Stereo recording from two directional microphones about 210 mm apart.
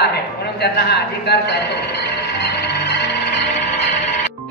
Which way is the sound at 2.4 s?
55° left (ahead or behind).